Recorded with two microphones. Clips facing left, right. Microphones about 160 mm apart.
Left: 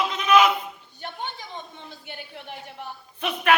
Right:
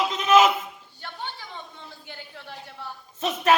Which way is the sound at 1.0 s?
20° left (ahead or behind).